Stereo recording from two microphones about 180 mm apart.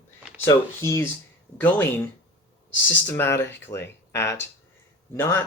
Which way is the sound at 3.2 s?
15° left (ahead or behind).